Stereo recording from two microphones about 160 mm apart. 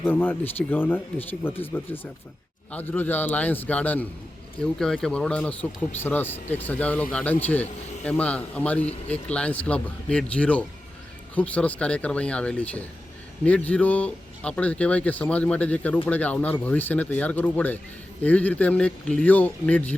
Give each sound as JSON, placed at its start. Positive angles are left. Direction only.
{"t": 0.0, "sound": "speech", "side_deg": 10}